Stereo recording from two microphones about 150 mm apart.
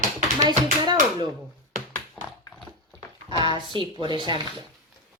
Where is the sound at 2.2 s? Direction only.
Centre (ahead or behind).